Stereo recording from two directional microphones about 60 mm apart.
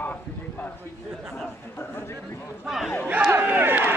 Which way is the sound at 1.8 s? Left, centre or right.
Left.